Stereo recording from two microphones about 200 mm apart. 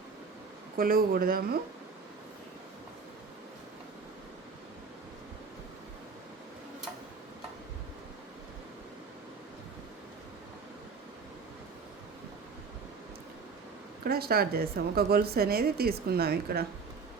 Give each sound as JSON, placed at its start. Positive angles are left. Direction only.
{"t": 0.8, "sound": "a woman's voice", "side_deg": -45}
{"t": 14.0, "sound": "a woman's voice", "side_deg": -50}